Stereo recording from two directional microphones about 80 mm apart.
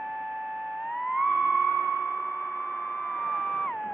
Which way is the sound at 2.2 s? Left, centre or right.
Left.